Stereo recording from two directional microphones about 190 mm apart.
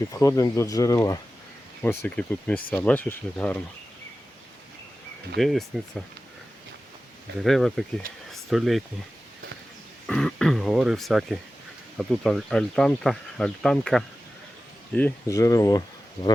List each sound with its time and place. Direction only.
0.1 s speech: 15° left (ahead or behind)
5.4 s speech: centre (ahead or behind)
7.4 s speech: centre (ahead or behind)
8.3 s a sound: centre (ahead or behind)
10.1 s throat clearing: 5° left (ahead or behind)
11.9 s speech: centre (ahead or behind)
14.9 s speech: 15° left (ahead or behind)